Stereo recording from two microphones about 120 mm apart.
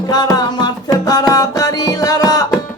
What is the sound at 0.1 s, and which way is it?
Music, 35° left (ahead or behind).